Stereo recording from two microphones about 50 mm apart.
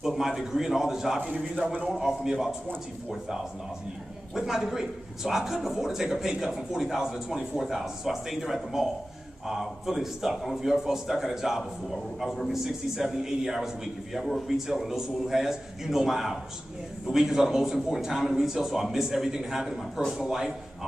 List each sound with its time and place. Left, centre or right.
0.0 s a man's voice: centre